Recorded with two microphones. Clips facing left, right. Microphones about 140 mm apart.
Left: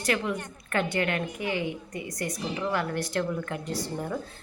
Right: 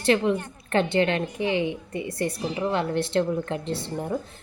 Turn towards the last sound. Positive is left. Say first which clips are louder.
# right 3 dB
turn(degrees=-25)  # may be behind; listen again after turning